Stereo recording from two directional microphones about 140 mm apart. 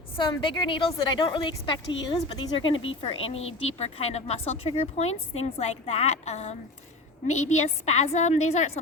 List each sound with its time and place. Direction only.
0.2 s a woman's voice: 35° left (ahead or behind); by 8.7 s 55° left (ahead or behind)